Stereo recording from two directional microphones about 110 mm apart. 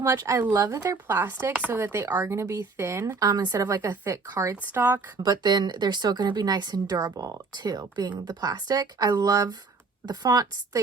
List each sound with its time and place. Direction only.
0.0 s speech: 30° right (ahead or behind)
3.2 s speech: 40° right (ahead or behind); by 4.9 s 20° right (ahead or behind)
5.1 s a woman's voice: 40° right (ahead or behind)